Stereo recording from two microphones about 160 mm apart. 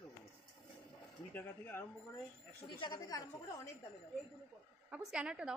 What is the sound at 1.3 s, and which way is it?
Speech, 10° left (ahead or behind).